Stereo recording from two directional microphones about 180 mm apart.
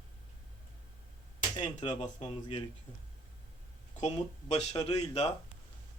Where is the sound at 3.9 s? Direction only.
40° left (ahead or behind).